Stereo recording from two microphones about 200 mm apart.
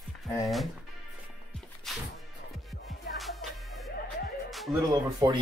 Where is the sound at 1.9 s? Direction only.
Centre (ahead or behind).